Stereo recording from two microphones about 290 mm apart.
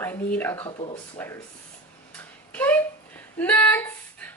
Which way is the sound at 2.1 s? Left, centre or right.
Centre.